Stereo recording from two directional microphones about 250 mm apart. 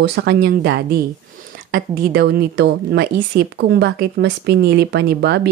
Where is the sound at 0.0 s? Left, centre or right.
Right.